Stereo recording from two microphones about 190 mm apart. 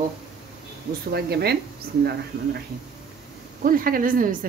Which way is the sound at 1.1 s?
55° right (ahead or behind).